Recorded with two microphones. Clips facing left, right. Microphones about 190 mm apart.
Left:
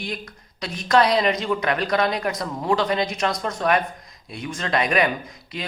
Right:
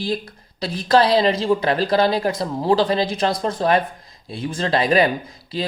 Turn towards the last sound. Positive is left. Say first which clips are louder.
# right 7 dB
turn(degrees=-30)  # may be behind; listen again after turning